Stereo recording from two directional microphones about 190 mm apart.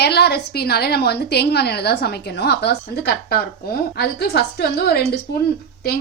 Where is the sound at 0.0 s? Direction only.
60° left (ahead or behind).